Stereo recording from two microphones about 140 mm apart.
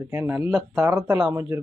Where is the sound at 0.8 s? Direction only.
20° right (ahead or behind).